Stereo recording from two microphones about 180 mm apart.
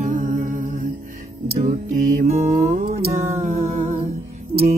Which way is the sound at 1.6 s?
50° right (ahead or behind).